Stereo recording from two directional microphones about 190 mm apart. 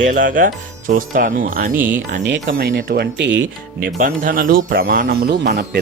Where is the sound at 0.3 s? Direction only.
45° right (ahead or behind).